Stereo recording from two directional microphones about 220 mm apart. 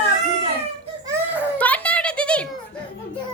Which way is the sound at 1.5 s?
5° left (ahead or behind).